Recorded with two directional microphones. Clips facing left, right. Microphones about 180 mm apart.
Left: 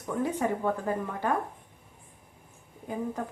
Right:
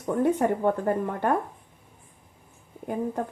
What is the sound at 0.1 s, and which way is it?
A woman's voice, 60° right (ahead or behind).